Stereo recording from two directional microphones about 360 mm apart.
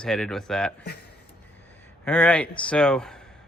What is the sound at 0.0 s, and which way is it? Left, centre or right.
Speech, centre.